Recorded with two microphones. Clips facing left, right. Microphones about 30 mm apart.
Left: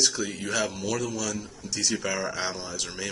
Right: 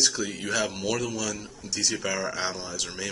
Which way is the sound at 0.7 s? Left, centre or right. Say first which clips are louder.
Right 1 dB; centre.